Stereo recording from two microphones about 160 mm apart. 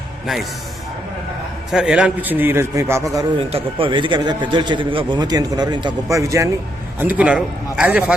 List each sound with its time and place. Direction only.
1.7 s a man's voice: 5° right (ahead or behind)
3.3 s a man's voice: 35° right (ahead or behind); by 8.1 s 10° right (ahead or behind)